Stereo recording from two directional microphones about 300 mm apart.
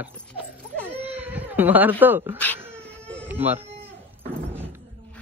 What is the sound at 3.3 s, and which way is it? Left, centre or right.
Speech, centre.